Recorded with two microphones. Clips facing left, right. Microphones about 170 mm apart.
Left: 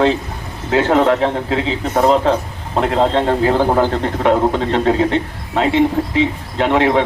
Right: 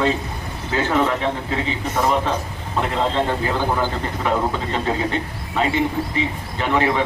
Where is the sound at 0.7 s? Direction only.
80° left.